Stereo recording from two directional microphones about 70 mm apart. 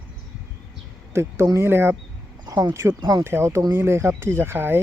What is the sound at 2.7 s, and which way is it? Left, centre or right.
Speech, right.